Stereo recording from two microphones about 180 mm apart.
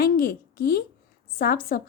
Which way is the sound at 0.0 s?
55° left (ahead or behind).